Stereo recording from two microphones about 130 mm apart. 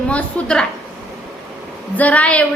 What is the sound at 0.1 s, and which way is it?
Speech, 10° left (ahead or behind).